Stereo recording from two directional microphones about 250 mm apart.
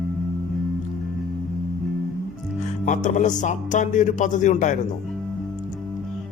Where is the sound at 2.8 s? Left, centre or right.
Left.